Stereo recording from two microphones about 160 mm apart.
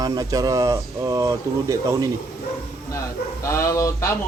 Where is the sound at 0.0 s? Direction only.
25° right (ahead or behind).